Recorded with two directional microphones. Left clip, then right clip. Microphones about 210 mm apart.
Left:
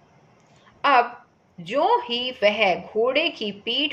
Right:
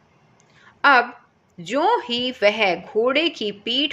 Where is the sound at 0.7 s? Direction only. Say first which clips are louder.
Right 3 dB; 50° right (ahead or behind).